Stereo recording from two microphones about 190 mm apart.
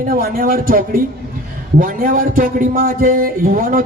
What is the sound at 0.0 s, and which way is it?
A man's voice, 50° right (ahead or behind).